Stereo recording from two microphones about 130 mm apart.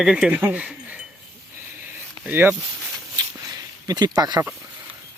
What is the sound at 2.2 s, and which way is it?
Speech, 15° right (ahead or behind).